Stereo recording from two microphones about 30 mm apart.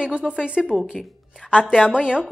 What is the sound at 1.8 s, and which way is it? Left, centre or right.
Speech, right.